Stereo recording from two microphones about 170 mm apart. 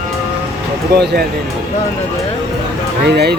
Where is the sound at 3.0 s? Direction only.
75° right (ahead or behind).